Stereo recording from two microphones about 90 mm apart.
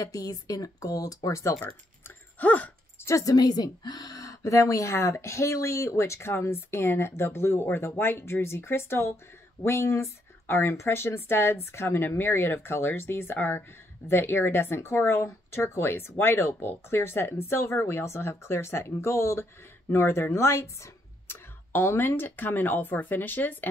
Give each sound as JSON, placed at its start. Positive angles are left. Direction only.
{"t": 0.0, "sound": "a woman's voice", "side_deg": 40}
{"t": 2.0, "sound": "a sound", "side_deg": 20}
{"t": 3.1, "sound": "a woman's voice", "side_deg": 40}